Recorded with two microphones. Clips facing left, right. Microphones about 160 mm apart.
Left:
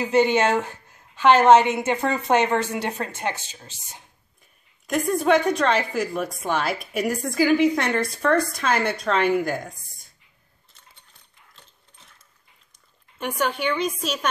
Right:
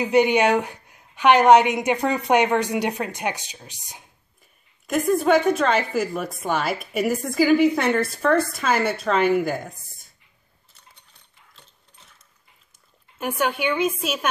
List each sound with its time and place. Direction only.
0.0 s a woman's voice: 15° right (ahead or behind)
4.8 s a woman's voice: centre (ahead or behind)
11.5 s dog: centre (ahead or behind)
13.2 s a woman's voice: 5° right (ahead or behind)